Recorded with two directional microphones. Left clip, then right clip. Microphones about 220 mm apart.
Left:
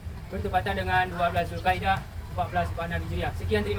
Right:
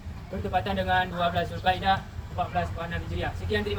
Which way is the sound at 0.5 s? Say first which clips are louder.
Even; centre (ahead or behind).